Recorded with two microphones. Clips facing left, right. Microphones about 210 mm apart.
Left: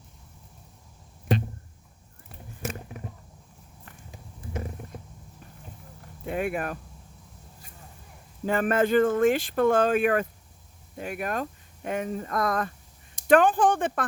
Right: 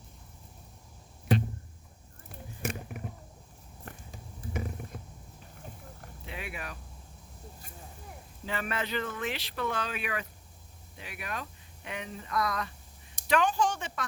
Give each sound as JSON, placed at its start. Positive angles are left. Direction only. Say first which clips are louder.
{"t": 6.2, "sound": "speech", "louder": "left 13 dB", "side_deg": 50}
{"t": 8.4, "sound": "speech", "louder": "left 11 dB", "side_deg": 45}